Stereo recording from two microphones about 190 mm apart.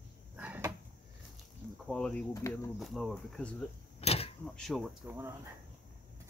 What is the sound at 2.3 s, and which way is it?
Speech, 15° left (ahead or behind).